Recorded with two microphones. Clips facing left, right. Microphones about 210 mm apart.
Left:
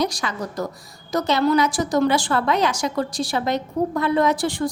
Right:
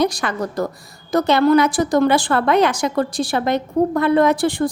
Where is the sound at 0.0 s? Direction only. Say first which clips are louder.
Right 5 dB; 55° right (ahead or behind).